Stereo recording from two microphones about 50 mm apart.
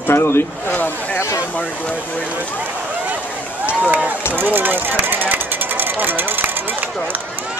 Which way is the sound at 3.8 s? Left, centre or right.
Right.